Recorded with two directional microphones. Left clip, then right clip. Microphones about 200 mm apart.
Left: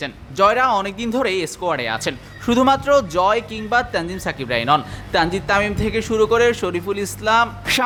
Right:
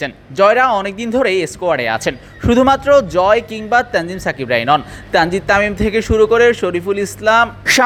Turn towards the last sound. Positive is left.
turn(degrees=-20)  # may be behind; listen again after turning